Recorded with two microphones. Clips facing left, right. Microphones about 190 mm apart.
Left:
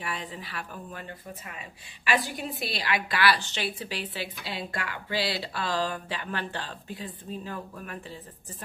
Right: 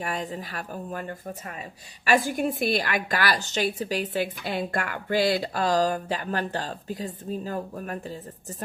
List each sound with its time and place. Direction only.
0.0 s a woman's voice: 45° right (ahead or behind)